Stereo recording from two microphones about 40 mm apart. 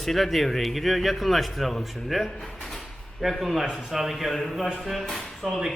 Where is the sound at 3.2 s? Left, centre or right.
Centre.